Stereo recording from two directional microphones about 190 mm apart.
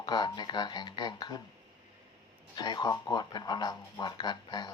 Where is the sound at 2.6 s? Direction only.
20° left (ahead or behind).